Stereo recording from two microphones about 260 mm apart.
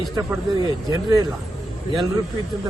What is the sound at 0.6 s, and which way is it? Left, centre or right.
Speech, centre.